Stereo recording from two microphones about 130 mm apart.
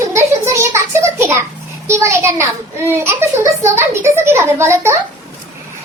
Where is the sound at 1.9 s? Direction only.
20° right (ahead or behind).